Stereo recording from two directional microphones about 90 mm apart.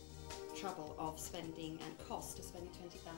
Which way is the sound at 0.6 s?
30° left (ahead or behind).